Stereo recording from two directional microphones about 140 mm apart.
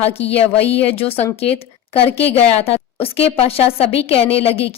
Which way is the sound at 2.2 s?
45° left (ahead or behind).